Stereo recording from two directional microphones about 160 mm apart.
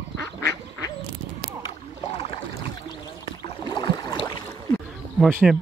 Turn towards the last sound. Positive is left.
turn(degrees=0)  # may be behind; listen again after turning